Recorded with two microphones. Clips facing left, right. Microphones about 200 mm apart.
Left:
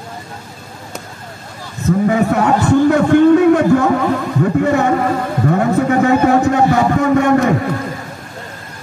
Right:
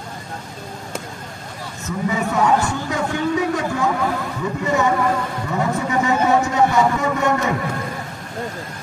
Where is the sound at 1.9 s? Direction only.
60° left (ahead or behind).